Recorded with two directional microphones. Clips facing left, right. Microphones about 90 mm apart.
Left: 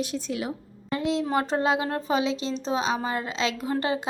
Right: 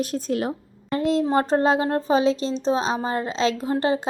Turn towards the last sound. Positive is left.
turn(degrees=-30)  # may be behind; listen again after turning